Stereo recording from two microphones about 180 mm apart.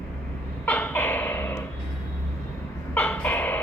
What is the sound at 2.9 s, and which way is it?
Chicken, 10° left (ahead or behind).